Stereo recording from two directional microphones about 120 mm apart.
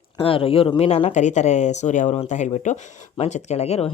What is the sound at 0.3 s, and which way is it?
Speech, 50° left (ahead or behind).